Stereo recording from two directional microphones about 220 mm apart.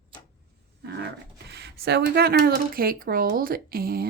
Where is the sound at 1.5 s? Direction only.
50° right (ahead or behind).